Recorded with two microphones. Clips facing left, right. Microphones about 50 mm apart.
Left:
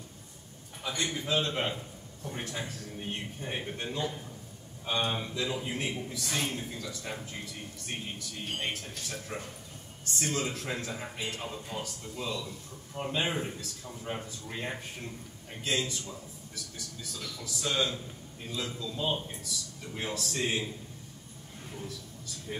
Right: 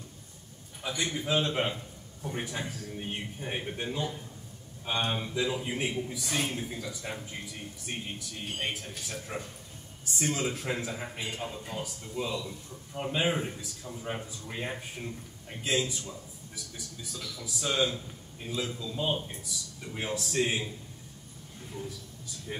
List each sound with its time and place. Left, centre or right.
0.8 s speech: centre
17.4 s speech: centre
22.5 s speech: centre